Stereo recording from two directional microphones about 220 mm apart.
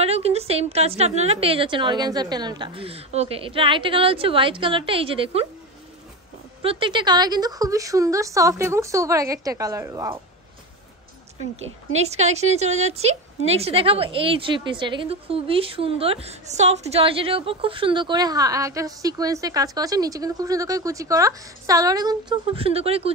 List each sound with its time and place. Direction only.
0.0 s a woman's voice: 30° right (ahead or behind)
6.6 s a woman's voice: 25° right (ahead or behind)
11.9 s a woman's voice: 30° right (ahead or behind)